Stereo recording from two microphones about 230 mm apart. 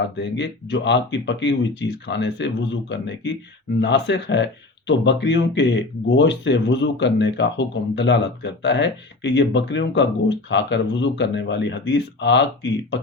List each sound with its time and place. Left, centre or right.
0.2 s speech: left